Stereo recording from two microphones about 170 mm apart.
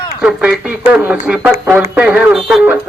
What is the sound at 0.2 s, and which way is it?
Speech, 5° right (ahead or behind).